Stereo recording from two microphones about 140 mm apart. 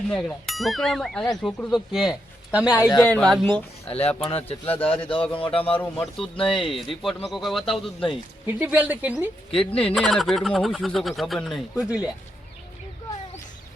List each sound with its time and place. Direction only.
0.1 s a man's voice: 5° left (ahead or behind)
3.0 s speech: 5° left (ahead or behind)
4.4 s a man's voice: 45° left (ahead or behind)
4.8 s speech: 10° left (ahead or behind)
5.3 s speech: 40° left (ahead or behind)
6.1 s speech: 5° left (ahead or behind)
8.4 s speech: 10° right (ahead or behind)
9.5 s speech: 40° left (ahead or behind)
9.8 s speech: 5° left (ahead or behind)